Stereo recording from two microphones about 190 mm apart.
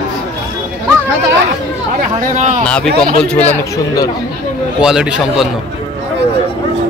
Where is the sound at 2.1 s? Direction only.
40° right (ahead or behind).